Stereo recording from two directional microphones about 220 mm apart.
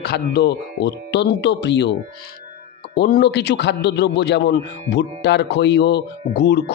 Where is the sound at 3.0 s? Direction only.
45° left (ahead or behind).